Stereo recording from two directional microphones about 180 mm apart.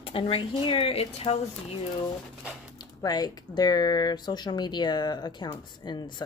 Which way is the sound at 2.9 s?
20° left (ahead or behind).